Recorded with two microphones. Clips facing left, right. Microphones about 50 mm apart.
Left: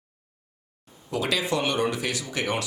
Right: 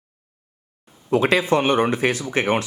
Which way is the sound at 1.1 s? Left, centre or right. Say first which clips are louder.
Right 8 dB; right.